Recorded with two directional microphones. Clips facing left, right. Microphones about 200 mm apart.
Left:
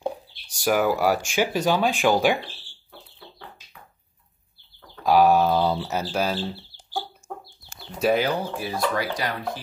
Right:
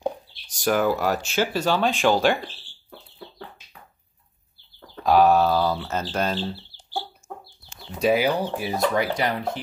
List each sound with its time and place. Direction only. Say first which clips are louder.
0.1 s speech: left 3 dB; 10° left (ahead or behind)
5.0 s speech: even; 10° left (ahead or behind)
8.0 s speech: right 1 dB; 10° right (ahead or behind)
8.6 s speech: right 3 dB; 20° right (ahead or behind)